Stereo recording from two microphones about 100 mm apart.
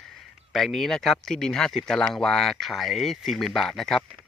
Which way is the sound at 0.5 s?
5° left (ahead or behind).